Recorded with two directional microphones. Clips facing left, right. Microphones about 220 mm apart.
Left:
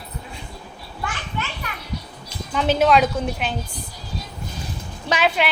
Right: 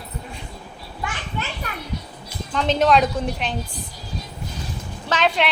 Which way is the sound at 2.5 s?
5° left (ahead or behind).